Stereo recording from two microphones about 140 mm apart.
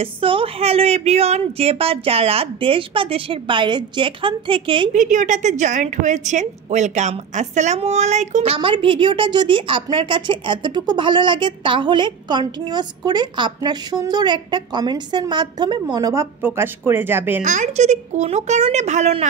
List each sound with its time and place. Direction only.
0.0 s a woman's voice: 40° right (ahead or behind)
4.9 s a woman's voice: 65° right (ahead or behind)
8.5 s a woman's voice: 40° right (ahead or behind); by 17.4 s 15° right (ahead or behind)
17.4 s speech: 60° right (ahead or behind)